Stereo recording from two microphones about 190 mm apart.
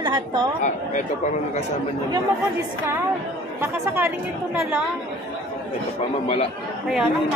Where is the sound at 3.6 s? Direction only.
10° right (ahead or behind).